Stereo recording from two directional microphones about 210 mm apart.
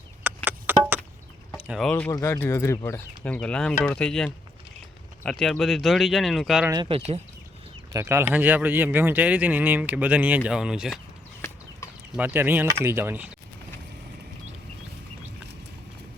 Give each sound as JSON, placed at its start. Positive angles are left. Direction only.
{"t": 0.2, "sound": "a sound", "side_deg": -10}
{"t": 1.5, "sound": "speech", "side_deg": -5}
{"t": 6.7, "sound": "speech", "side_deg": -25}
{"t": 7.9, "sound": "speech", "side_deg": -15}
{"t": 12.1, "sound": "speech", "side_deg": -10}